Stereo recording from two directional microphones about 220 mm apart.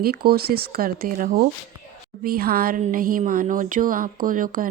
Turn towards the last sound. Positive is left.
turn(degrees=-40)  # may be behind; listen again after turning